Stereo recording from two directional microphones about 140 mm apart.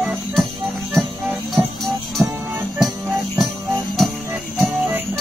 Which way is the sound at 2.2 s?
5° right (ahead or behind).